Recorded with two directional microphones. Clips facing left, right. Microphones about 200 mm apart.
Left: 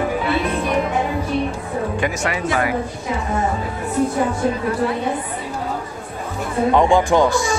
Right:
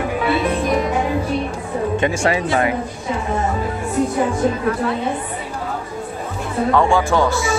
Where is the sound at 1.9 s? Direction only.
25° right (ahead or behind).